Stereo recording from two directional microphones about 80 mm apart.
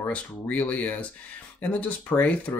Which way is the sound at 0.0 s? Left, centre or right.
Centre.